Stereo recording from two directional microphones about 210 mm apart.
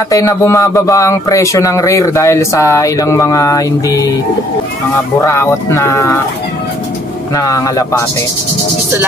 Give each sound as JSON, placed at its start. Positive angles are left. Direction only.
{"t": 0.1, "sound": "speech", "side_deg": 15}
{"t": 5.2, "sound": "speech", "side_deg": 15}
{"t": 7.3, "sound": "speech", "side_deg": 15}